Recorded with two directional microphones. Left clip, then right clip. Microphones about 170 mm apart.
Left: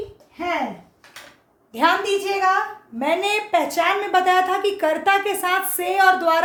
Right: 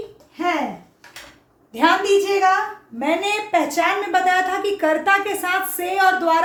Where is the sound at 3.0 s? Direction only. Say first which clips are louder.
Even; 35° left (ahead or behind).